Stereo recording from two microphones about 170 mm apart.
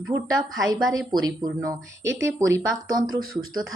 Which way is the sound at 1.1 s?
20° right (ahead or behind).